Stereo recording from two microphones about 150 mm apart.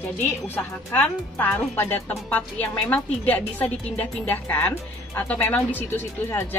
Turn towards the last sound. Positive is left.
turn(degrees=15)  # may be behind; listen again after turning